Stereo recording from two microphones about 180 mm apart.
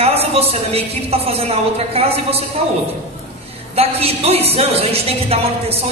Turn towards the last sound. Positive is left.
turn(degrees=-35)  # may be behind; listen again after turning